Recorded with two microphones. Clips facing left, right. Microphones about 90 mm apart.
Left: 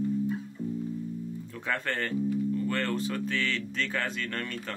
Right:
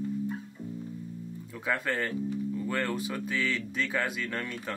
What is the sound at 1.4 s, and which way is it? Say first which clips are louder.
Speech: right 3 dB; 10° right (ahead or behind).